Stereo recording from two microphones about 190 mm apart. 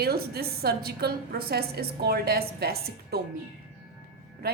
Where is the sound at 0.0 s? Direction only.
55° right (ahead or behind).